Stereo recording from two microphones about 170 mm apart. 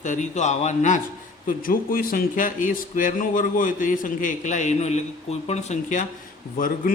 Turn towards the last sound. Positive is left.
turn(degrees=50)  # may be behind; listen again after turning